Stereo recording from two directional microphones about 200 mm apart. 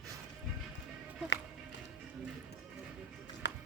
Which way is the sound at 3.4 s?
65° left (ahead or behind).